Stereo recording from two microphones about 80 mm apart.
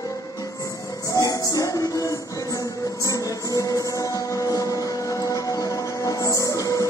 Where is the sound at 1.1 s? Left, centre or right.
Left.